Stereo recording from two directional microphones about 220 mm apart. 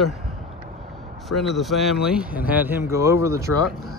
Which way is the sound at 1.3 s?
Centre (ahead or behind).